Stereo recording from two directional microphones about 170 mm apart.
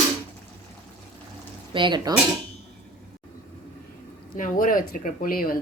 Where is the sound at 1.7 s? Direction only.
25° right (ahead or behind).